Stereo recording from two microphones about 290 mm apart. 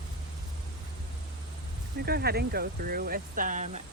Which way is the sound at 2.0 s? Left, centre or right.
Right.